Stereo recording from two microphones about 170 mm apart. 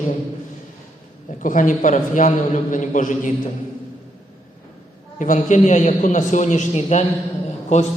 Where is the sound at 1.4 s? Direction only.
50° left (ahead or behind).